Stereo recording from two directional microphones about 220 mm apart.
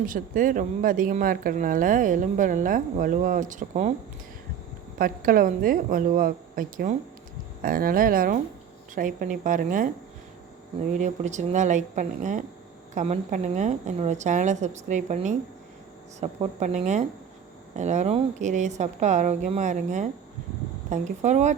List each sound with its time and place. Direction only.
0.0 s speech: 40° right (ahead or behind)
4.9 s speech: 40° right (ahead or behind)
10.9 s speech: 35° right (ahead or behind)